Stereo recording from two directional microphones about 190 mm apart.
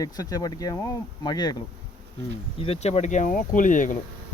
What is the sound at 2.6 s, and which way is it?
Speech, 30° left (ahead or behind).